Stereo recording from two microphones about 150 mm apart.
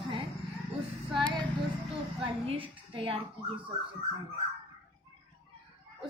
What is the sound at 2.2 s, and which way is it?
A woman's voice, 40° right (ahead or behind).